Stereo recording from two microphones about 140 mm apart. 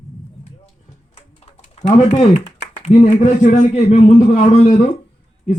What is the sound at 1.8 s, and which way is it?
Speech, 55° left (ahead or behind).